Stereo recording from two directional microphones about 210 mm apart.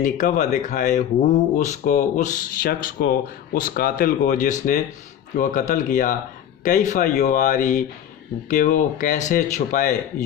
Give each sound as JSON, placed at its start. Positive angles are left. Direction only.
{"t": 0.0, "sound": "speech", "side_deg": 40}